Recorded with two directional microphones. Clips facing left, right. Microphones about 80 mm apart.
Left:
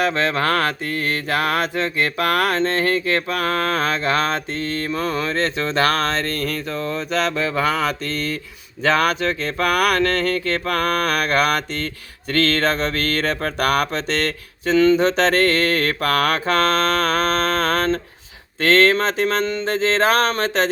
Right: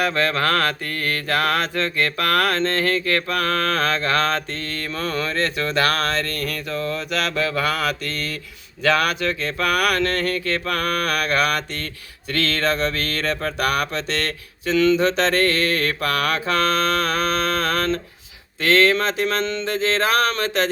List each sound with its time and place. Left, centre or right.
0.0 s mantra: left